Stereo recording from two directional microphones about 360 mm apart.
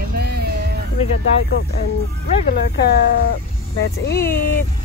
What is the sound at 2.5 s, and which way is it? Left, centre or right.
Speech, left.